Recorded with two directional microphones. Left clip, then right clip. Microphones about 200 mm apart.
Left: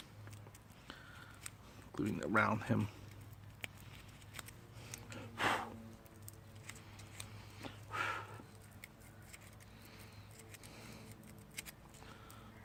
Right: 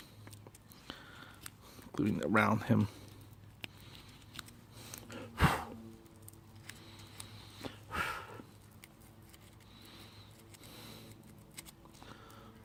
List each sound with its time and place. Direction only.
0.9 s biting: 35° right (ahead or behind)
1.9 s speech: 35° right (ahead or behind)
4.8 s gasp: 30° right (ahead or behind)
7.6 s snort: 30° right (ahead or behind)
10.7 s a sound: 25° right (ahead or behind)